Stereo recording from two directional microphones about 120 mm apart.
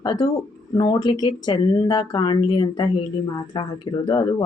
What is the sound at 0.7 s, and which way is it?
Speech, 40° left (ahead or behind).